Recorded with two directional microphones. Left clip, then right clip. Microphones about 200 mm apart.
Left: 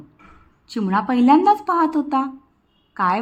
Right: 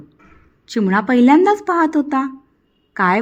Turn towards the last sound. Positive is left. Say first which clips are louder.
# right 3 dB
turn(degrees=-25)  # may be behind; listen again after turning